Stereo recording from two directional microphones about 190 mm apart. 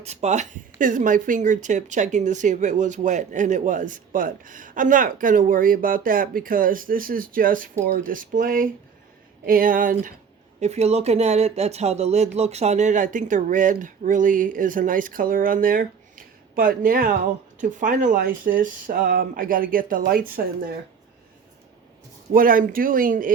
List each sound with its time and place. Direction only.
0.0 s speech: 35° right (ahead or behind)
10.6 s speech: 35° right (ahead or behind)
22.3 s speech: 50° right (ahead or behind)